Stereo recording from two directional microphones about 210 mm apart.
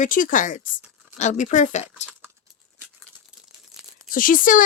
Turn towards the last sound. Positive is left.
turn(degrees=40)  # may be behind; listen again after turning